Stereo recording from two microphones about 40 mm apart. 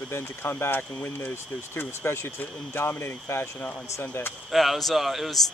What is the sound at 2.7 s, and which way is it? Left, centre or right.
Speech, left.